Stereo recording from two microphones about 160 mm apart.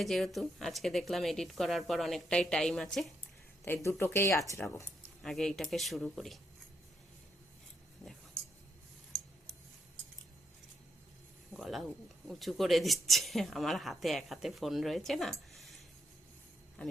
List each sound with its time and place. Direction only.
0.0 s speech: centre (ahead or behind)
3.8 s speech: 15° left (ahead or behind)
5.2 s speech: centre (ahead or behind)
11.5 s speech: centre (ahead or behind)